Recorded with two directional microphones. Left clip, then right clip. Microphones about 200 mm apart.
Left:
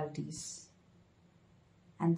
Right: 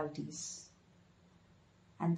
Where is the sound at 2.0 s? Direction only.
30° left (ahead or behind).